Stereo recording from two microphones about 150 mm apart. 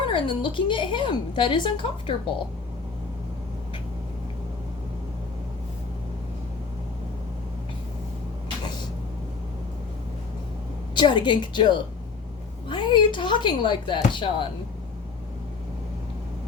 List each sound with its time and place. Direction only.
0.1 s a woman's voice: 35° left (ahead or behind)
10.9 s a woman's voice: 30° left (ahead or behind)